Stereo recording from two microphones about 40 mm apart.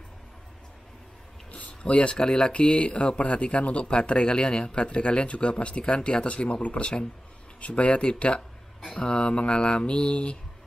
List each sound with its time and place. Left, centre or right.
1.5 s speech: left